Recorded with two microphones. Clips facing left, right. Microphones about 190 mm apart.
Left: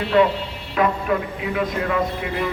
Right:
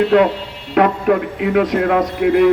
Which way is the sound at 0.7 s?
65° right (ahead or behind).